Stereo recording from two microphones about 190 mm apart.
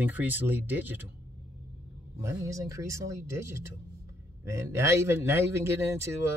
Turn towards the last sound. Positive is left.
turn(degrees=-15)  # may be behind; listen again after turning